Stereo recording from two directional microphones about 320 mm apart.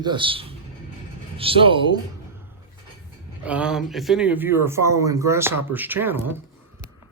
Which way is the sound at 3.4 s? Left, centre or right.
Centre.